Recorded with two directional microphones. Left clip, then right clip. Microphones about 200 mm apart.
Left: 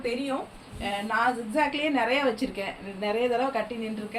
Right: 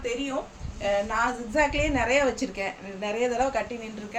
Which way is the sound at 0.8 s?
15° right (ahead or behind).